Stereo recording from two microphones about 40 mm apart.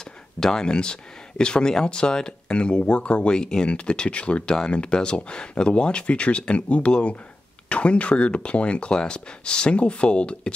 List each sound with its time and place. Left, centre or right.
0.4 s speech: centre